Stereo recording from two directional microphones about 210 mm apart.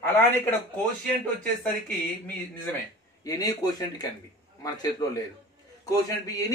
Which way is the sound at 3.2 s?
15° left (ahead or behind).